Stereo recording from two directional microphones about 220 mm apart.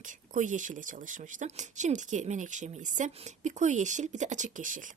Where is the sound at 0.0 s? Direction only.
35° right (ahead or behind).